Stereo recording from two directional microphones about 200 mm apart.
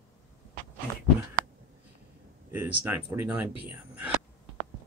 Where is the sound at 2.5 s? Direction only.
10° right (ahead or behind).